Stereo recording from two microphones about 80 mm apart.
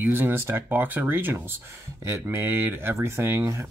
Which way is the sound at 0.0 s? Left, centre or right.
Right.